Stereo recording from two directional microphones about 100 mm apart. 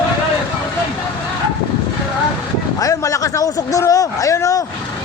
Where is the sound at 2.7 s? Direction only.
35° left (ahead or behind).